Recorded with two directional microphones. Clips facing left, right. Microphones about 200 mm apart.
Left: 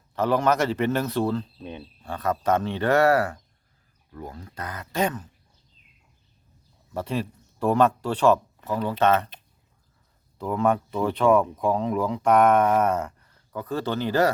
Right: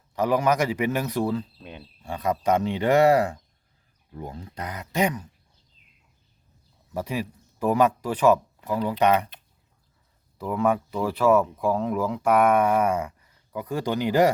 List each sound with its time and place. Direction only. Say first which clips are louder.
0.2 s speech: even; 10° right (ahead or behind)
6.9 s speech: left 1 dB; 10° right (ahead or behind)
10.3 s speech: even; centre (ahead or behind)